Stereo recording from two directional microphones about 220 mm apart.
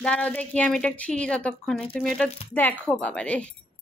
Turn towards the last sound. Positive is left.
turn(degrees=5)  # may be behind; listen again after turning